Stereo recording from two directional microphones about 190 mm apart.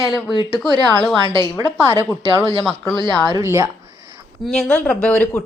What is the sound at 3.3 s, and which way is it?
Speech, 15° right (ahead or behind).